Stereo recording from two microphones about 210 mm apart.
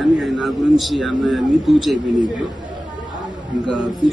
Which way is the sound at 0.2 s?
Centre (ahead or behind).